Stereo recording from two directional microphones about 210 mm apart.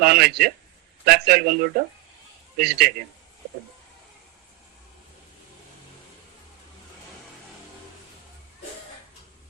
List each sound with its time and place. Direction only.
0.0 s speech: 50° right (ahead or behind)